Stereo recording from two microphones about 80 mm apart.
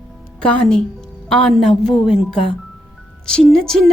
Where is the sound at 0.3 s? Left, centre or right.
Centre.